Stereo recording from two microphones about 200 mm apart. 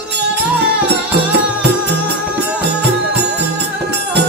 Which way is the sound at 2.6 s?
55° right (ahead or behind).